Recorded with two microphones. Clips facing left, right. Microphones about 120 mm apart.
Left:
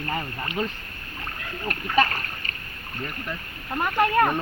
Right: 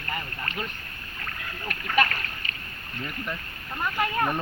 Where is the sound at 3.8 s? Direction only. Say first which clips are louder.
Left 6 dB; 55° left (ahead or behind).